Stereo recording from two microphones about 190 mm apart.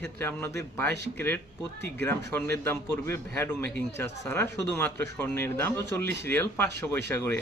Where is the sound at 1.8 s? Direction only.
10° left (ahead or behind).